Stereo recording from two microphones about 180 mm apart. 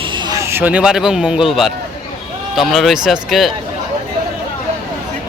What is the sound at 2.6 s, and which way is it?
Speech, centre (ahead or behind).